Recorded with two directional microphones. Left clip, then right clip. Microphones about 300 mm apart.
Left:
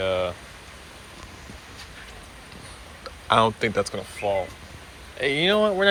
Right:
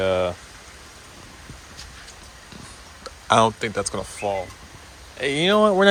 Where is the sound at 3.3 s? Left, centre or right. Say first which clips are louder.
Right 2 dB; centre.